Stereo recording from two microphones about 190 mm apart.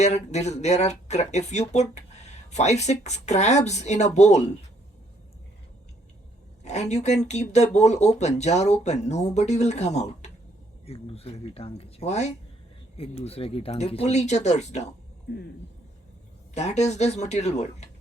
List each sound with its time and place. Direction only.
0.0 s speech: 35° left (ahead or behind)
6.7 s speech: 35° left (ahead or behind)
16.6 s speech: 35° left (ahead or behind)